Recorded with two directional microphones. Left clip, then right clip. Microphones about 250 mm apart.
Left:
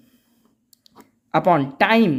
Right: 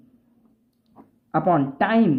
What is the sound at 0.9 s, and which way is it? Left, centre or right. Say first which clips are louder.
Speech: left 4 dB; left.